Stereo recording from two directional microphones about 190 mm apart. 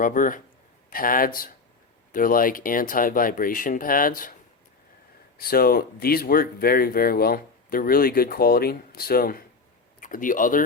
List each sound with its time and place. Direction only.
0.0 s speech: 45° left (ahead or behind)
5.4 s speech: 50° left (ahead or behind)